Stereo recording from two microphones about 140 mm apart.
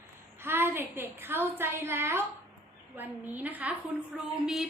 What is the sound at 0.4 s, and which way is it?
A woman's voice, 15° right (ahead or behind).